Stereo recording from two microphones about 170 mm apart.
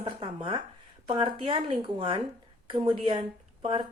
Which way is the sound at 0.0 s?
35° right (ahead or behind).